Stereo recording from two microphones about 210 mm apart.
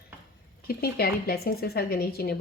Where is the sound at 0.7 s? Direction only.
45° left (ahead or behind).